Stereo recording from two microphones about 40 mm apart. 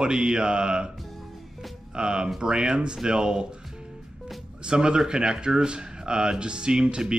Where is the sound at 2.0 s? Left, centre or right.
Right.